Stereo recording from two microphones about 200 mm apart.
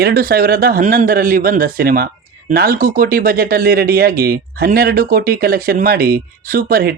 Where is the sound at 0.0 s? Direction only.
50° right (ahead or behind).